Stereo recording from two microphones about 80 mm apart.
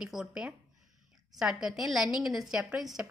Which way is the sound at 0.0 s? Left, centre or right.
Centre.